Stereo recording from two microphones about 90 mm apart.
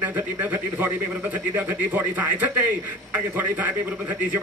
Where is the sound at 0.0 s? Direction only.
20° right (ahead or behind).